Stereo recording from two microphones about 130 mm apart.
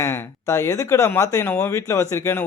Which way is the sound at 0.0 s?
20° left (ahead or behind).